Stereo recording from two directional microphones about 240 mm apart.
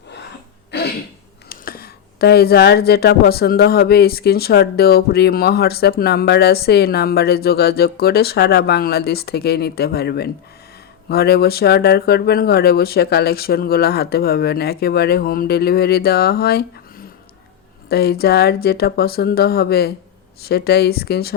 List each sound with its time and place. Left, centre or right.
0.7 s throat clearing: left
1.5 s speech: left